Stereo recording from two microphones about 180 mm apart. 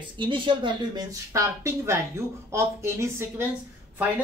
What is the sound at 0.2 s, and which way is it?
Speech, 25° right (ahead or behind).